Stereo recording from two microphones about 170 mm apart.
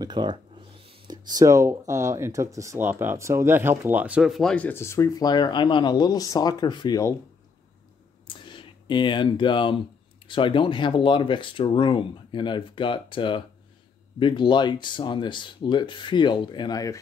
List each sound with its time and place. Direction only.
0.0 s speech: 25° right (ahead or behind); by 7.2 s 20° left (ahead or behind)
8.3 s a sound: 30° left (ahead or behind)
10.2 s speech: 30° left (ahead or behind)